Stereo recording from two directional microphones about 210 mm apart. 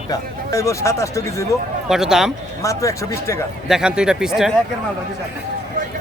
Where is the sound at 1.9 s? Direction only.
Centre (ahead or behind).